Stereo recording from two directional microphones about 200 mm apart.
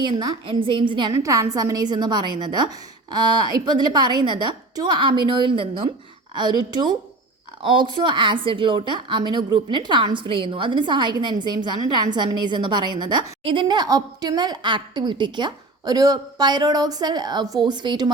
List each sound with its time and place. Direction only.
0.0 s a woman's voice: 20° right (ahead or behind)